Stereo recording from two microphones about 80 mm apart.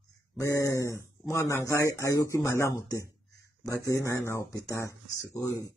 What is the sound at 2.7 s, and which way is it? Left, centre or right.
Speech, left.